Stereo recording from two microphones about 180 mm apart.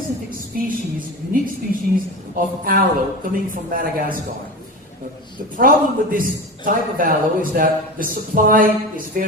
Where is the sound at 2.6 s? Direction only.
50° right (ahead or behind).